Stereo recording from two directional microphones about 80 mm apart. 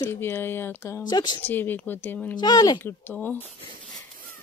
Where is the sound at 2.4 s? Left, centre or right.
Left.